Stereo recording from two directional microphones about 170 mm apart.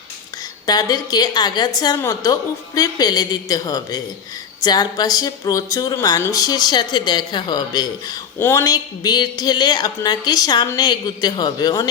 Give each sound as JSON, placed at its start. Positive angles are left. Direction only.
{"t": 0.7, "sound": "speech", "side_deg": 20}